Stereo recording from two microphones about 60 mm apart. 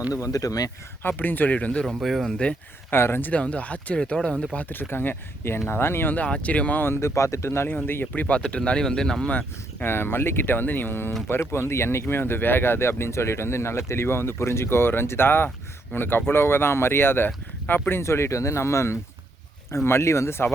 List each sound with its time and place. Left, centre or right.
0.1 s speech: left
1.0 s speech: left
2.0 s speech: centre
2.9 s speech: left; by 4.4 s centre
4.5 s speech: left
6.1 s speech: centre
6.8 s speech: left
7.9 s speech: left; by 9.2 s centre
9.8 s speech: left